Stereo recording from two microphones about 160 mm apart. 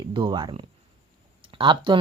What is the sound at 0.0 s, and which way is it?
Speech, 30° right (ahead or behind).